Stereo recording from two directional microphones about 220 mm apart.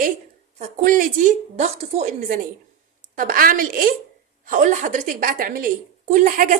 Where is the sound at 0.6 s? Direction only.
35° right (ahead or behind).